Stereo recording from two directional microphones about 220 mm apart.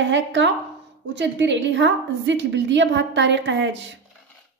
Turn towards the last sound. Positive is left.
turn(degrees=-55)  # may be behind; listen again after turning